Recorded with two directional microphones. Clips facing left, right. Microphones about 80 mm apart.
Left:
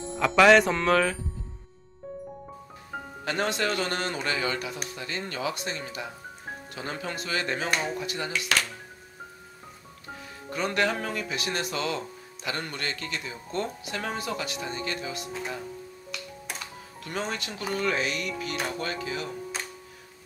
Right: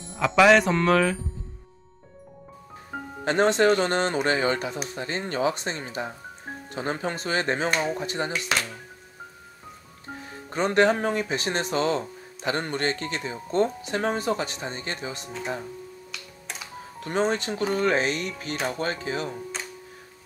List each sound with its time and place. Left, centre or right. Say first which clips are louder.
0.0 s speech: right 1 dB; centre
3.3 s speech: right 8 dB; right
10.0 s speech: right 2 dB; right
16.1 s music: left 2 dB; centre
17.0 s speech: right 8 dB; right